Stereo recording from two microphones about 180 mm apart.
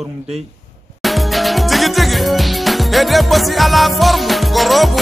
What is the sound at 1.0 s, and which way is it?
Music, centre (ahead or behind).